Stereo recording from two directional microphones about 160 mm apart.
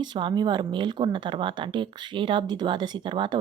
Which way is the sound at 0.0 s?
30° right (ahead or behind).